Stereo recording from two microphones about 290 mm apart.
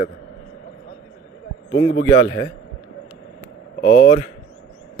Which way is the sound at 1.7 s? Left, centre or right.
Left.